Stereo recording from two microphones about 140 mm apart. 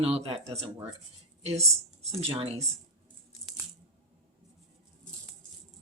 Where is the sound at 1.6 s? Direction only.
50° right (ahead or behind).